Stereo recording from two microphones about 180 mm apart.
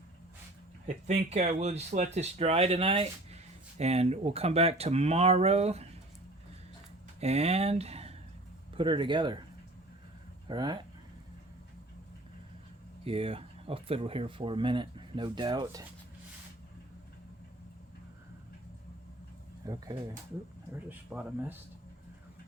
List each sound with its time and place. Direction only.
0.9 s speech: 40° right (ahead or behind)
7.2 s speech: 35° right (ahead or behind)
10.5 s speech: 25° right (ahead or behind)
13.1 s speech: 30° right (ahead or behind)
19.6 s speech: 20° right (ahead or behind)
21.1 s speech: 10° right (ahead or behind)